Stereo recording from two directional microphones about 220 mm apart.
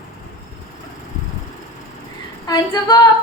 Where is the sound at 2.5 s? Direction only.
15° left (ahead or behind).